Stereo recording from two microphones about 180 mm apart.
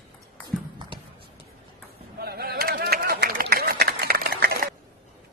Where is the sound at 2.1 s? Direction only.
60° right (ahead or behind).